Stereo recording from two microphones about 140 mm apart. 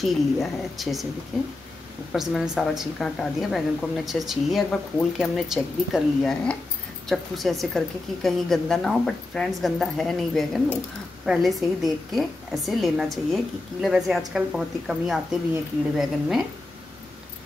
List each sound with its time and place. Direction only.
0.0 s a woman's voice: centre (ahead or behind)
2.1 s a woman's voice: 5° right (ahead or behind)